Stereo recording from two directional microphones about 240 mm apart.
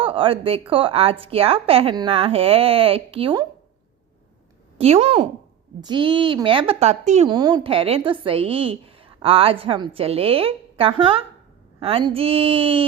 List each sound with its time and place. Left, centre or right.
0.0 s a woman's voice: right
4.8 s a woman's voice: right
7.3 s a woman's voice: centre